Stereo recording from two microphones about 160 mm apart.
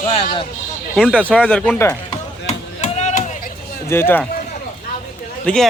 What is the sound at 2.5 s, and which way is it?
Chop, 45° left (ahead or behind).